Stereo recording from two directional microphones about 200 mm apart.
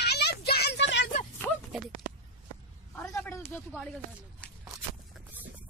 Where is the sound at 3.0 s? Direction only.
10° left (ahead or behind).